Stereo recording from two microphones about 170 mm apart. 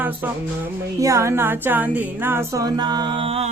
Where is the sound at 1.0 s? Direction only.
15° right (ahead or behind).